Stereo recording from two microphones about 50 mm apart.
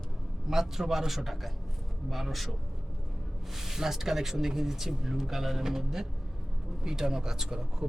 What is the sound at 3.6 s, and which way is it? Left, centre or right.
Speech, centre.